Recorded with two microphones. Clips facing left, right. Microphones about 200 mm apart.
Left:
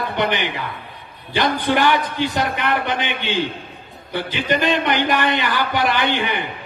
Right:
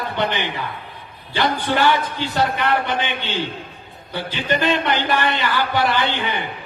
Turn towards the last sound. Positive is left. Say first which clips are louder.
# left 1 dB
turn(degrees=15)  # may be behind; listen again after turning